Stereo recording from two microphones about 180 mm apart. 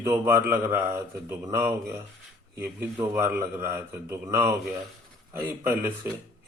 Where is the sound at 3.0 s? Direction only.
10° right (ahead or behind).